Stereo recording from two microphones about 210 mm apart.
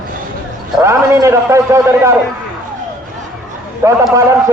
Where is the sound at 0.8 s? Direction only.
15° right (ahead or behind).